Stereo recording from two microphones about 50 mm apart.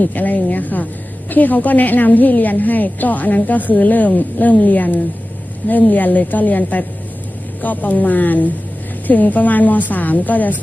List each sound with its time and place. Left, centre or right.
0.0 s a woman's voice: left